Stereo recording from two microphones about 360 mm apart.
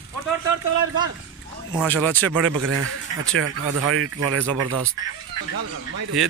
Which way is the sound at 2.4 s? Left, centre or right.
Right.